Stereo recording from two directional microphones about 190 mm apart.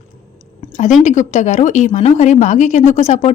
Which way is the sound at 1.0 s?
40° left (ahead or behind).